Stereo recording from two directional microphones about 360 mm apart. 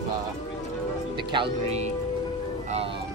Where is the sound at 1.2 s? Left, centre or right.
Centre.